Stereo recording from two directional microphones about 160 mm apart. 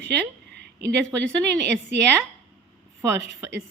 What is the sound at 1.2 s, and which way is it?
Speech, 90° right.